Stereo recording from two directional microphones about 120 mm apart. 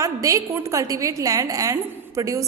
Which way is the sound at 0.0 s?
25° right (ahead or behind).